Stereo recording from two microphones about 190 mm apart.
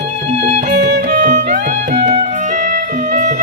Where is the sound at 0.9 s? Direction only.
45° right (ahead or behind).